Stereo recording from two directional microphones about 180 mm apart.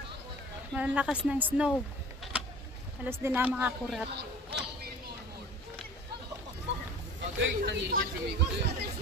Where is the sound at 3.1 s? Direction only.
15° right (ahead or behind).